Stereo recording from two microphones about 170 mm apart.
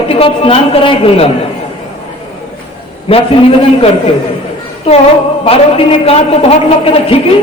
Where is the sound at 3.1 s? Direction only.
35° left (ahead or behind).